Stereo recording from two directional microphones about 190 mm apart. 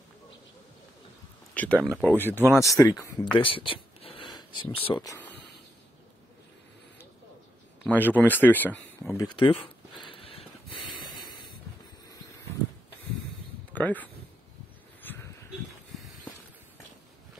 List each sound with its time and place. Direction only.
1.5 s a sound: 5° left (ahead or behind)
1.8 s speech: 10° right (ahead or behind)
2.0 s speech: 10° left (ahead or behind)
7.8 s speech: 10° left (ahead or behind); by 10.4 s 30° left (ahead or behind)
13.7 s speech: 10° left (ahead or behind)
15.0 s a sound: 10° left (ahead or behind)